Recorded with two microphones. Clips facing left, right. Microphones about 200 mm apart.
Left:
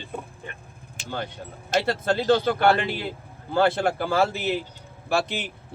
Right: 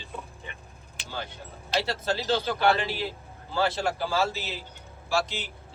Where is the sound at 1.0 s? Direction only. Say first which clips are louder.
Left 5 dB; 55° left (ahead or behind).